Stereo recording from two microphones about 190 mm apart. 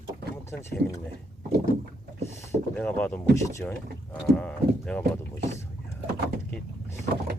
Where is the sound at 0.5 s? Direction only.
10° left (ahead or behind).